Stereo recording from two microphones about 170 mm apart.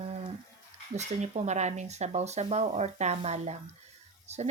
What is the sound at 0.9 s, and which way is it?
Speech, 40° right (ahead or behind).